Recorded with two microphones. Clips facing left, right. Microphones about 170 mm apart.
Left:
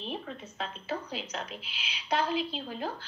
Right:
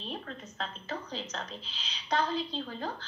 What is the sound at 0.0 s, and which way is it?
A woman's voice, 10° left (ahead or behind).